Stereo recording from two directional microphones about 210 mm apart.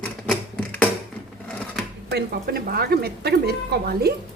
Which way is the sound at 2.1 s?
45° right (ahead or behind).